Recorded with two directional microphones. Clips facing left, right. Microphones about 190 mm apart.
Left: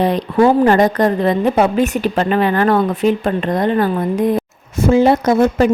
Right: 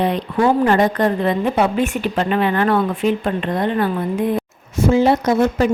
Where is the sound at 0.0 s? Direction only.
40° left (ahead or behind).